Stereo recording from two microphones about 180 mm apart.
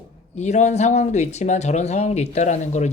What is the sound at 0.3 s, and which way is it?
Speech, 40° left (ahead or behind).